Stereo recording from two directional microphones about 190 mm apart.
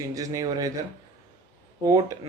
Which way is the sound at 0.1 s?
20° right (ahead or behind).